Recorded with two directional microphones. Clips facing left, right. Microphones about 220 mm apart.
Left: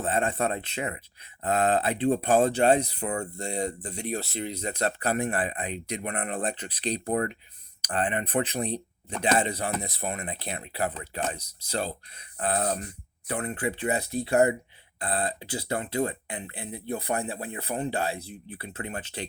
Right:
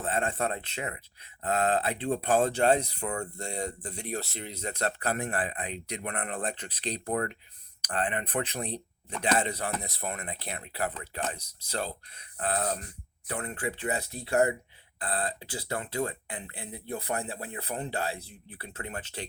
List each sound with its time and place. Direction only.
0.0 s speech: 20° left (ahead or behind)